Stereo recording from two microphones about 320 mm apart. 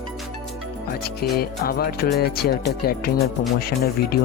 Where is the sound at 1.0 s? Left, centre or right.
Left.